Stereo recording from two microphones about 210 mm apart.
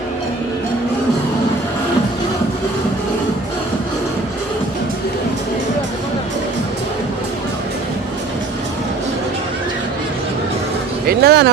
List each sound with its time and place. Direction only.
11.1 s speech: 50° right (ahead or behind)